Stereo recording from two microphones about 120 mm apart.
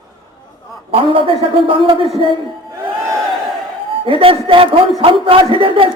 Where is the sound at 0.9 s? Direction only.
45° right (ahead or behind).